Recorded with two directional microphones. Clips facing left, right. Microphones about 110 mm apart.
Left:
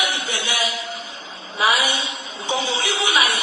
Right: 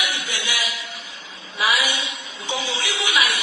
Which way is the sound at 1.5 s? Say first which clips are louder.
Left 3 dB; 30° left (ahead or behind).